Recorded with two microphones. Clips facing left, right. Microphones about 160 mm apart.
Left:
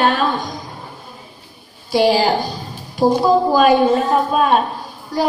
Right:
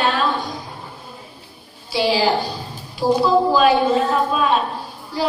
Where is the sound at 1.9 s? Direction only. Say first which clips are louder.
Left 4 dB; 50° left (ahead or behind).